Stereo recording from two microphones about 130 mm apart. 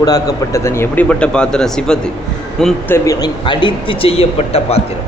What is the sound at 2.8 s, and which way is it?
Speech, 20° left (ahead or behind).